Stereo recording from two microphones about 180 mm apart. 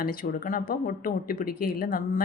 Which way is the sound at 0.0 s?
55° left (ahead or behind).